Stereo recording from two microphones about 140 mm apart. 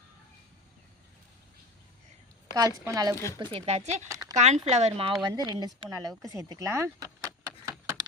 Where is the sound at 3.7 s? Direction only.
50° right (ahead or behind).